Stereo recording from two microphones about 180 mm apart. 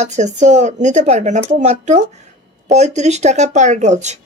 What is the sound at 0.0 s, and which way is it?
Speech, 40° right (ahead or behind).